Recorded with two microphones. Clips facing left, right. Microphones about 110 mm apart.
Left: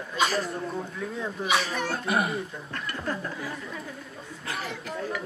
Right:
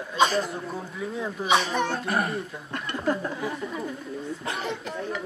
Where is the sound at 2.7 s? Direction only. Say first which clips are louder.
Right 6 dB; 15° right (ahead or behind).